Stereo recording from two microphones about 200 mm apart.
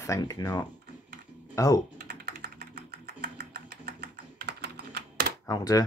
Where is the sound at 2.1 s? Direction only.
50° right (ahead or behind).